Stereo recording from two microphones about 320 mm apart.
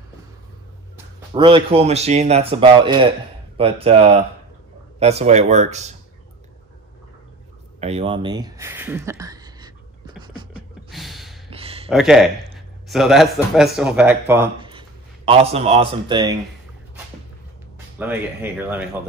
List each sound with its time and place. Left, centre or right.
0.9 s speech: centre
7.8 s speech: centre
10.5 s gasp: centre
11.5 s a sound: centre
11.9 s speech: centre
17.9 s speech: centre